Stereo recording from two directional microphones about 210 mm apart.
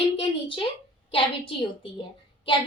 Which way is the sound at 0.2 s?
25° left (ahead or behind).